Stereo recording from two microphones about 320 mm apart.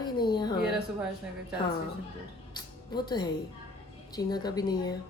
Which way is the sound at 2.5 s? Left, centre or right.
Centre.